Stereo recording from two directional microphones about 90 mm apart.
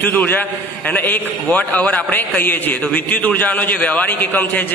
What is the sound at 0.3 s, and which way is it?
A man's voice, 20° left (ahead or behind).